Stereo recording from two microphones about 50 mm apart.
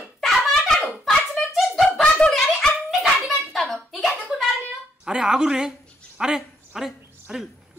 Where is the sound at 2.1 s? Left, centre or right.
Centre.